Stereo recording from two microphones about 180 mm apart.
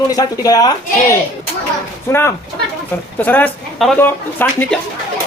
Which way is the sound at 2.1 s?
15° left (ahead or behind).